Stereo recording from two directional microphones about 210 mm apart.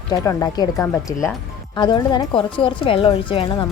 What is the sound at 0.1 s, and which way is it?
A woman's voice, 15° left (ahead or behind).